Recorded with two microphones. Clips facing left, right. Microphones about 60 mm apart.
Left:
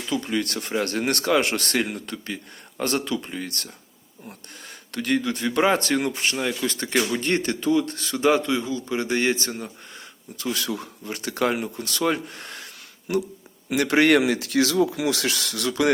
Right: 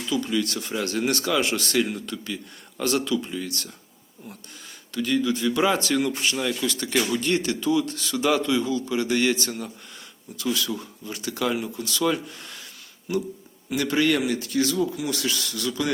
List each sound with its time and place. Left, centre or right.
0.1 s speech: left
4.9 s speech: left
6.3 s speech: left
10.3 s speech: left
13.7 s speech: left